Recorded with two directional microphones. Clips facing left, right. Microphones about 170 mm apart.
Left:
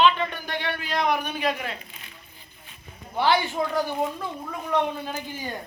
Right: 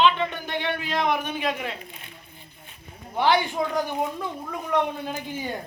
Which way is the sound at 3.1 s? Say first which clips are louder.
Right 1 dB; 15° right (ahead or behind).